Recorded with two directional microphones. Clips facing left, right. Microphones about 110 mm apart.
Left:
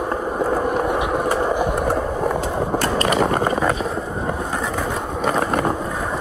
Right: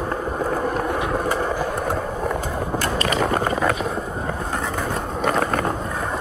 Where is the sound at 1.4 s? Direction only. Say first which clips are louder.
Left 4 dB; 20° left (ahead or behind).